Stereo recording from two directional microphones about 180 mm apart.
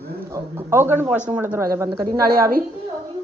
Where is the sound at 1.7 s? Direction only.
20° right (ahead or behind).